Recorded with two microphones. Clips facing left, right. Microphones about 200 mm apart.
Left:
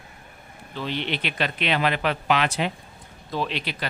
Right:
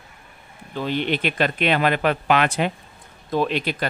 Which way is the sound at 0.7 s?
45° right (ahead or behind).